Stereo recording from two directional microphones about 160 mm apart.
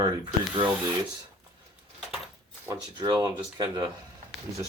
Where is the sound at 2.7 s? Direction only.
30° right (ahead or behind).